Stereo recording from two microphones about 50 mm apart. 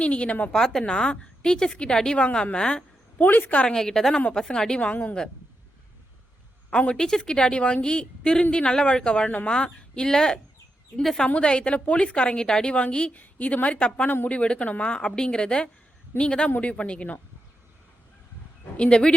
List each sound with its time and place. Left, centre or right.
0.0 s a woman's voice: left
0.5 s a woman's voice: centre
3.2 s speech: left
3.8 s a woman's voice: centre; by 5.1 s left
6.7 s a woman's voice: centre
11.3 s a woman's voice: left
18.8 s a woman's voice: centre